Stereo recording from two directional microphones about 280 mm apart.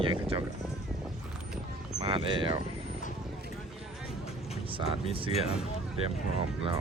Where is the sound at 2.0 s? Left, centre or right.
Centre.